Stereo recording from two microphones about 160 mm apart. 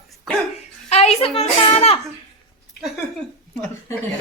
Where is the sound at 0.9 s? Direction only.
40° left (ahead or behind).